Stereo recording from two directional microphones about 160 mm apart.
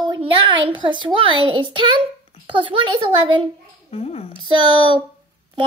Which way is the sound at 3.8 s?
40° left (ahead or behind).